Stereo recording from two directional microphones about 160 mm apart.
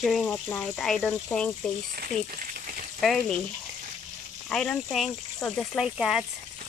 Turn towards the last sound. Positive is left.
turn(degrees=-5)  # may be behind; listen again after turning